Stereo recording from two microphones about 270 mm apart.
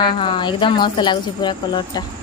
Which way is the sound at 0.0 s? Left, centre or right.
Centre.